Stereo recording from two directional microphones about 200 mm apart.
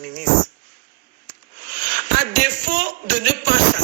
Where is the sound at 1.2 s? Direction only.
45° right (ahead or behind).